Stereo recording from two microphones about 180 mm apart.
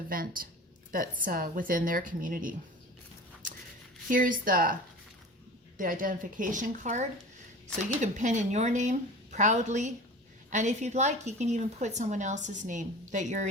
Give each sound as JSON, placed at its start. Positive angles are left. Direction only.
{"t": 0.1, "sound": "speech", "side_deg": -50}
{"t": 4.1, "sound": "a woman's voice", "side_deg": -50}